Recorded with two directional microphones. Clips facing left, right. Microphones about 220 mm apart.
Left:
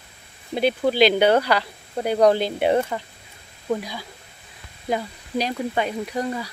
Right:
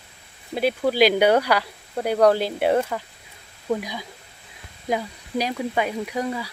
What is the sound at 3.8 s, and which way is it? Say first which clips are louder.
Speech: right 1 dB; 15° right (ahead or behind).